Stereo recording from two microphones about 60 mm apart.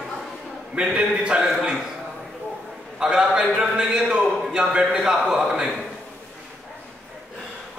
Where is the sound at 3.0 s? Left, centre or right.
Centre.